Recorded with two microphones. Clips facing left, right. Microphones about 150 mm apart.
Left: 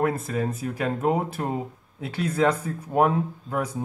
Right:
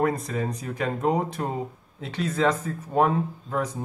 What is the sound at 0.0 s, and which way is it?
Speech, 5° left (ahead or behind).